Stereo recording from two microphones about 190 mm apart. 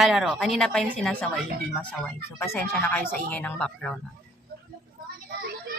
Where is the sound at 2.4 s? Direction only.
10° left (ahead or behind).